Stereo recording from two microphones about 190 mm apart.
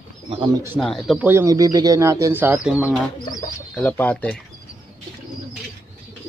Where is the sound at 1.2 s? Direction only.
15° right (ahead or behind).